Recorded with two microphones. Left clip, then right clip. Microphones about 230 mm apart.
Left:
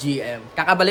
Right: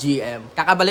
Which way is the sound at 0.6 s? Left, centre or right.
Centre.